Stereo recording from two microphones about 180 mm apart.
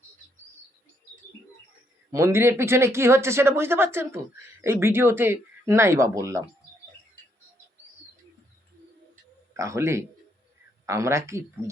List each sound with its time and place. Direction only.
2.1 s speech: 15° right (ahead or behind)
9.6 s speech: 15° right (ahead or behind)